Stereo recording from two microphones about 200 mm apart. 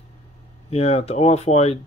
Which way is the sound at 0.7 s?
30° left (ahead or behind).